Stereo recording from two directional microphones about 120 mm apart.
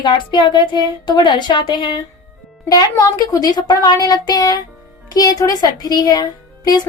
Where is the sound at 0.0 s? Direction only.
40° left (ahead or behind).